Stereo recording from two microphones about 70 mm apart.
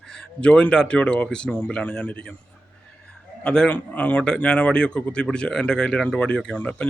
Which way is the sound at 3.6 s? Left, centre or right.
Left.